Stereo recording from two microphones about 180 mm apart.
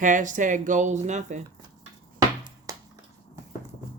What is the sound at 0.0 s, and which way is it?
Speech, 45° right (ahead or behind).